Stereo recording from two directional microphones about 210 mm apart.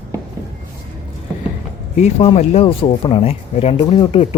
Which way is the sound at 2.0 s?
30° left (ahead or behind).